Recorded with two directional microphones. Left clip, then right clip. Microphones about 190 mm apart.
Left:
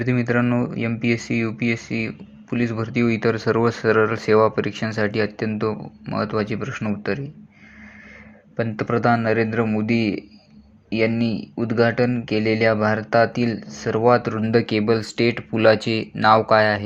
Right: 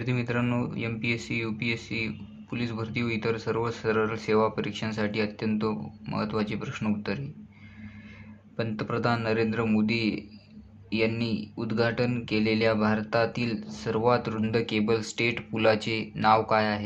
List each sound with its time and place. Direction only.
0.0 s speech: 25° left (ahead or behind)
8.5 s speech: 25° left (ahead or behind)